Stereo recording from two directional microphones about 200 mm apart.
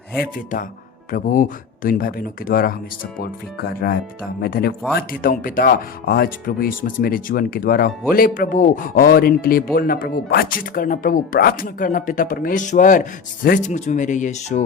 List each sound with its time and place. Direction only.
0.2 s speech: 45° left (ahead or behind)